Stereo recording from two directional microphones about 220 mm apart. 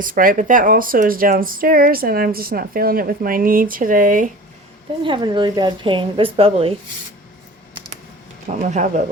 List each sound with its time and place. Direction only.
0.0 s speech: 40° right (ahead or behind)
5.0 s a woman's voice: 20° right (ahead or behind)
8.4 s speech: 30° right (ahead or behind)